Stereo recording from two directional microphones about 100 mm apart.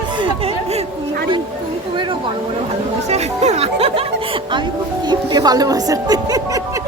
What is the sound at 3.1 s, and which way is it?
Speech, 90° right.